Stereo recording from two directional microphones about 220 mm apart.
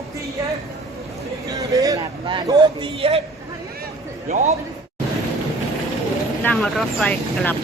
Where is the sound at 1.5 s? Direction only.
15° right (ahead or behind).